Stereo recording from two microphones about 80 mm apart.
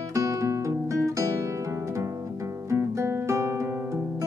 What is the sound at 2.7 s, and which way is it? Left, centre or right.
Music, right.